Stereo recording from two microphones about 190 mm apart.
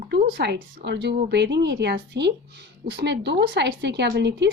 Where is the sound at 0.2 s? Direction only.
55° right (ahead or behind).